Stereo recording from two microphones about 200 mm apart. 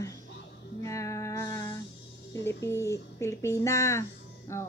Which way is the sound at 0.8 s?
15° left (ahead or behind).